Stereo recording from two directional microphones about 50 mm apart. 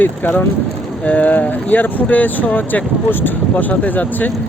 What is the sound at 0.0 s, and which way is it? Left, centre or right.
Speech, left.